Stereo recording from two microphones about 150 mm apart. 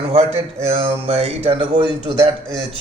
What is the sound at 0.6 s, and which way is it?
A man's voice, 40° right (ahead or behind).